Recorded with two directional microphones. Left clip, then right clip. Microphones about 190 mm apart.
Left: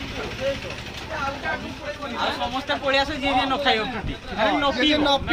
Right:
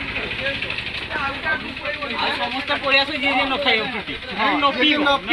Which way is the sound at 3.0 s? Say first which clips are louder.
Right 2 dB; 10° left (ahead or behind).